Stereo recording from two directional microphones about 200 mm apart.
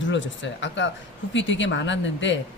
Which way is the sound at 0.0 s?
65° left (ahead or behind).